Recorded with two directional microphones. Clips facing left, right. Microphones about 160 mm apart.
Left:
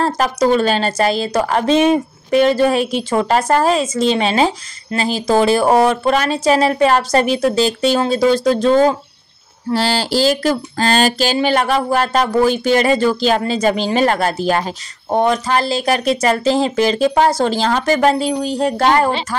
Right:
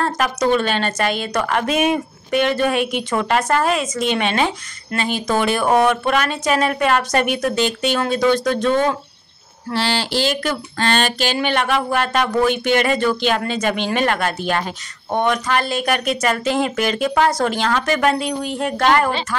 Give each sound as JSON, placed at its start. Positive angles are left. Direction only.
{"t": 0.0, "sound": "a woman's voice", "side_deg": 35}